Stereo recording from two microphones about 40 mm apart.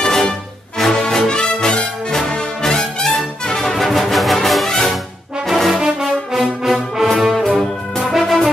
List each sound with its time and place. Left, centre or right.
0.0 s music: centre
1.6 s brass instrument: left
2.6 s music: centre
5.7 s brass instrument: centre
8.1 s music: centre